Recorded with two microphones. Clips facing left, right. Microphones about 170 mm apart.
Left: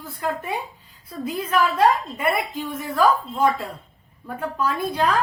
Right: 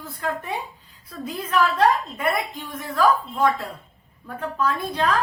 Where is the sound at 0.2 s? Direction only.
5° left (ahead or behind).